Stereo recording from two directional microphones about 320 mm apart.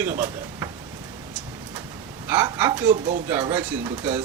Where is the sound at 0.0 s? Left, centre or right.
Centre.